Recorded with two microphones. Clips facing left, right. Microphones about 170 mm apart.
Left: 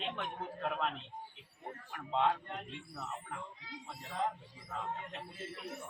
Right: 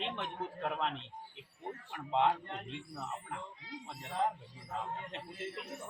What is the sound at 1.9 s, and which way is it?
Speech, 20° right (ahead or behind).